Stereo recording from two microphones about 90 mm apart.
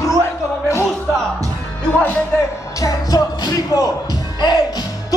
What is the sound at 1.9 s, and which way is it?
Speech, 20° left (ahead or behind).